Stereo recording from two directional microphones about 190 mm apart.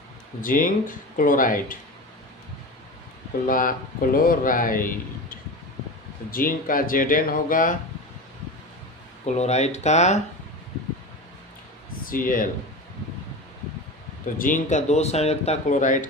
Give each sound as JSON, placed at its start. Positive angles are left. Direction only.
{"t": 0.4, "sound": "speech", "side_deg": 45}
{"t": 3.4, "sound": "speech", "side_deg": 45}
{"t": 9.2, "sound": "speech", "side_deg": 35}
{"t": 12.0, "sound": "speech", "side_deg": 45}
{"t": 14.3, "sound": "speech", "side_deg": 45}